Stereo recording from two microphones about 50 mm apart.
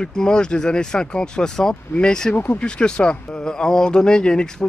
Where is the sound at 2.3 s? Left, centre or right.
Left.